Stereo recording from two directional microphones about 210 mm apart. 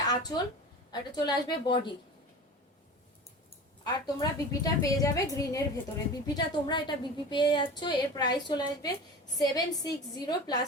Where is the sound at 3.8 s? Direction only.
15° left (ahead or behind).